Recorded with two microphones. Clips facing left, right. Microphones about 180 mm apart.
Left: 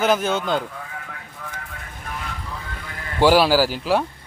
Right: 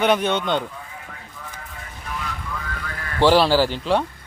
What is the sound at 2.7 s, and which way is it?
Vehicle, 20° left (ahead or behind).